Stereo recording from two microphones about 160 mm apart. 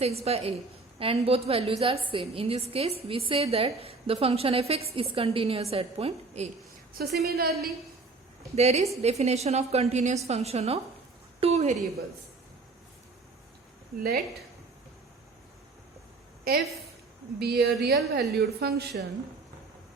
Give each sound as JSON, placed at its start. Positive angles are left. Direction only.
{"t": 0.0, "sound": "a woman's voice", "side_deg": -40}
{"t": 6.9, "sound": "a woman's voice", "side_deg": -80}
{"t": 8.5, "sound": "a woman's voice", "side_deg": -40}
{"t": 17.4, "sound": "a woman's voice", "side_deg": -90}